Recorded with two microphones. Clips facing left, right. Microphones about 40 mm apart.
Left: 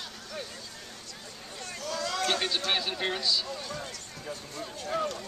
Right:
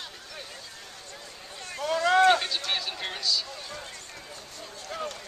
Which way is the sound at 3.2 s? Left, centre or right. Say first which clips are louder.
Even; centre.